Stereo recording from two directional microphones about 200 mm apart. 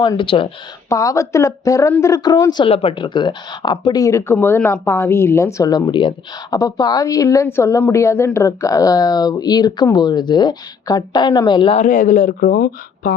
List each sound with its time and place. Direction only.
0.0 s speech: 25° left (ahead or behind)
11.8 s speech: 40° left (ahead or behind)